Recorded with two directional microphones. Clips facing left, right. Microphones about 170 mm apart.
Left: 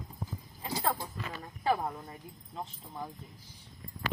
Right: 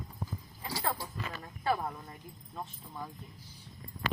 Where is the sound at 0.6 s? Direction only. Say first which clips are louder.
Left 3 dB; 20° left (ahead or behind).